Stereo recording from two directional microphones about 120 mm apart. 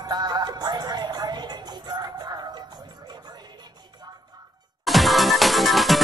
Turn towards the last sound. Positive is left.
turn(degrees=0)  # may be behind; listen again after turning